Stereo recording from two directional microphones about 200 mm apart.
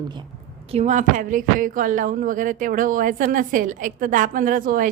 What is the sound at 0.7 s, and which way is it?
A woman's voice, 35° right (ahead or behind).